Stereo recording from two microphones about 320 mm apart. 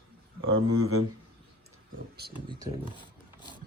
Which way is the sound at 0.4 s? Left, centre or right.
Right.